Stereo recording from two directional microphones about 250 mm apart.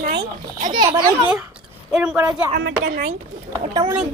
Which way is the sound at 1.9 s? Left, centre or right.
Centre.